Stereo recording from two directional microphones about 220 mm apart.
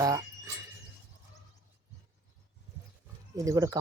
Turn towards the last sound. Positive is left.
turn(degrees=-15)  # may be behind; listen again after turning